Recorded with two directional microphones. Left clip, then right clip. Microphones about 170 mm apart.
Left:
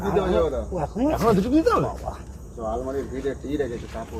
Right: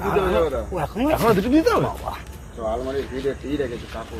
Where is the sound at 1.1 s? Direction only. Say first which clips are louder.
Right 3 dB; 45° right (ahead or behind).